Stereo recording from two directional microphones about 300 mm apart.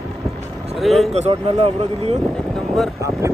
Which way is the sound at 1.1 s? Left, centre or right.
Right.